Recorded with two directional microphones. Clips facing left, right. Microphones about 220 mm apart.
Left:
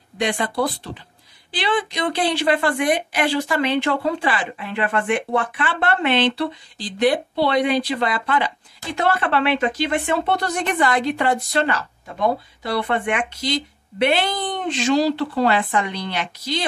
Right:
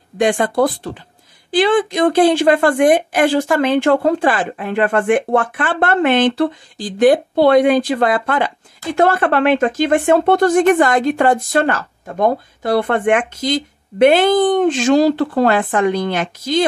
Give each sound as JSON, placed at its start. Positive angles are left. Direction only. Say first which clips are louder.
{"t": 0.2, "sound": "speech", "louder": "right 7 dB", "side_deg": -45}